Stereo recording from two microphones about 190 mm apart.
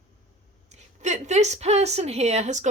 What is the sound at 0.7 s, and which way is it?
A woman's voice, 35° right (ahead or behind).